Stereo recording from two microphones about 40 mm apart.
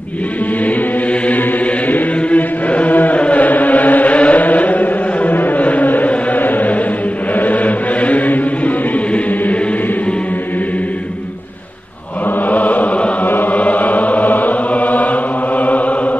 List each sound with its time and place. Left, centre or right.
1.9 s chant: left
5.6 s a sound: left
7.3 s chant: left
12.4 s chant: left
13.2 s chant: left
13.6 s mantra: left
15.5 s chant: left